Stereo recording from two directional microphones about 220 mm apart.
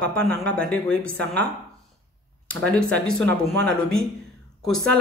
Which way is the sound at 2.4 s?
5° left (ahead or behind).